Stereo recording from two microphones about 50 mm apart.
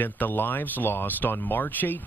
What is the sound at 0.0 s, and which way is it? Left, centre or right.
Speech, left.